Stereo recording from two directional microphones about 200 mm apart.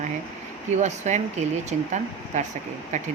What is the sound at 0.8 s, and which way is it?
Speech, 35° right (ahead or behind).